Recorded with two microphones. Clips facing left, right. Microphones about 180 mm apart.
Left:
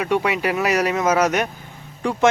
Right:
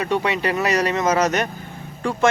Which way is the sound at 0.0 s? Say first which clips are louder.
Left 1 dB; 10° left (ahead or behind).